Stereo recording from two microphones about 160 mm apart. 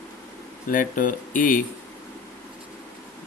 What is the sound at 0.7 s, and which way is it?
Speech, 55° left (ahead or behind).